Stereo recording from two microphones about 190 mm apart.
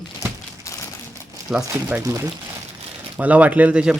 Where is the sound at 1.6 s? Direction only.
15° right (ahead or behind).